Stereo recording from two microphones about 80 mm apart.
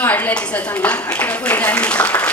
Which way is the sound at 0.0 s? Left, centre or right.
Left.